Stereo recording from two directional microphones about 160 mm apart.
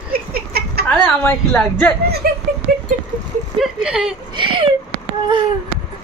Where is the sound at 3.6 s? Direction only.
5° right (ahead or behind).